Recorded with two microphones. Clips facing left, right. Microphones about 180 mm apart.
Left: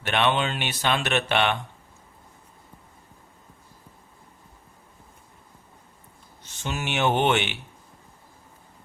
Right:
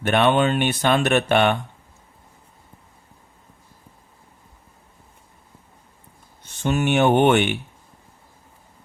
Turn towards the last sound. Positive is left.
turn(degrees=-50)  # may be behind; listen again after turning